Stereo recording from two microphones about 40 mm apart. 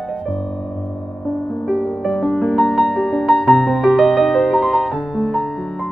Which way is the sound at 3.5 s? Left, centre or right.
Centre.